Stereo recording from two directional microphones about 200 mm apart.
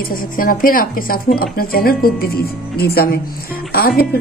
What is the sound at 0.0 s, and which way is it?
A woman's voice, 45° left (ahead or behind).